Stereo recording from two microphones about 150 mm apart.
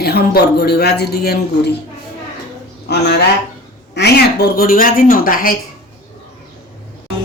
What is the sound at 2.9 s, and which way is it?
Speech, 90° left.